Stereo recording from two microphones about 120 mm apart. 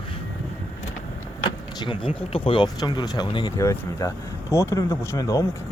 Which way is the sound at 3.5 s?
25° left (ahead or behind).